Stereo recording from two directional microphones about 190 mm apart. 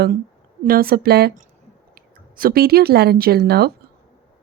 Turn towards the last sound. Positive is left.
turn(degrees=-55)  # may be behind; listen again after turning